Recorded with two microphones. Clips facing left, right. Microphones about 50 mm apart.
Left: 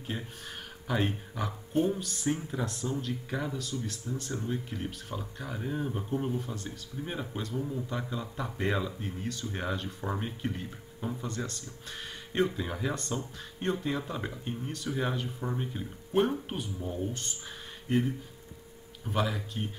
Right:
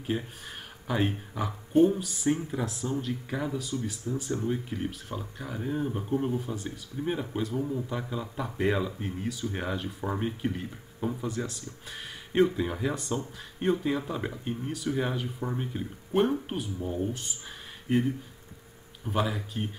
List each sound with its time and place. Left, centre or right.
0.0 s speech: centre